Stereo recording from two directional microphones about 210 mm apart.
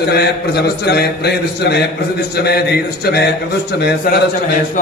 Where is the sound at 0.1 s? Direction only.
50° left (ahead or behind).